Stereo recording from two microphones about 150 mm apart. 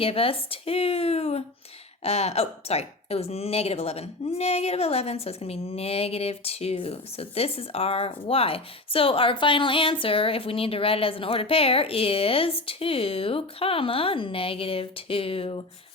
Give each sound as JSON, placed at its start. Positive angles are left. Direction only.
{"t": 0.0, "sound": "speech", "side_deg": 40}